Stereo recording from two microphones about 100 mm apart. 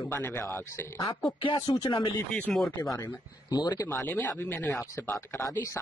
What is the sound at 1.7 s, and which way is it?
Speech, 40° left (ahead or behind).